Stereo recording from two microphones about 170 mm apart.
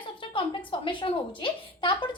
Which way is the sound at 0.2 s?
30° left (ahead or behind).